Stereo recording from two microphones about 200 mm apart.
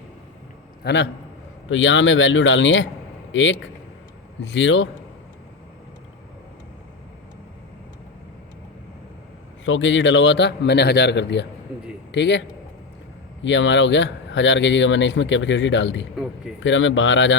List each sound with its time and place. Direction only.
0.9 s speech: 60° left (ahead or behind)
9.6 s speech: 70° left (ahead or behind)